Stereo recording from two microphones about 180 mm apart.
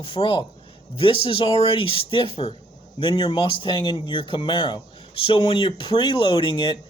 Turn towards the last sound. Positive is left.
turn(degrees=25)  # may be behind; listen again after turning